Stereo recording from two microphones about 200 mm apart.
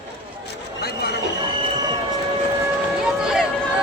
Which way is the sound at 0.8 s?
50° left (ahead or behind).